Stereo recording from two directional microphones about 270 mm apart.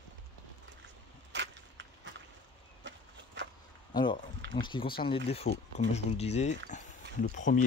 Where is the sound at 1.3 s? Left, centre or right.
Right.